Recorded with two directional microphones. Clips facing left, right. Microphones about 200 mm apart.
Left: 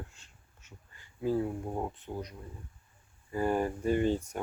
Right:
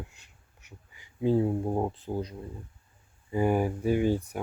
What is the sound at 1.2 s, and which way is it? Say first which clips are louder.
Speech: right 6 dB; 25° right (ahead or behind).